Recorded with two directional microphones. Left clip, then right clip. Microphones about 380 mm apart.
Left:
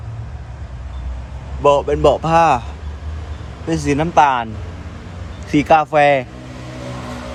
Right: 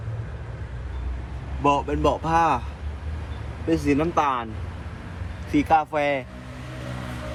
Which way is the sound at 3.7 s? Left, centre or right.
Centre.